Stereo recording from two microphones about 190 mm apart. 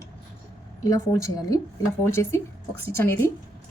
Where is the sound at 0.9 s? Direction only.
15° left (ahead or behind).